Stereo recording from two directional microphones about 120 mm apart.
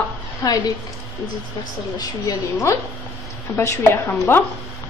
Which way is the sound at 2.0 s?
30° left (ahead or behind).